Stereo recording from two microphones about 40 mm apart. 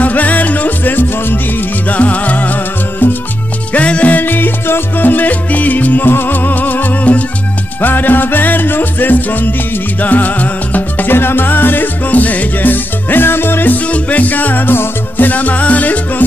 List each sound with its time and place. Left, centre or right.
0.0 s music: left
1.9 s music: left
3.7 s music: left
4.1 s music: left
6.0 s music: left
7.8 s music: left
11.1 s music: left
13.8 s music: left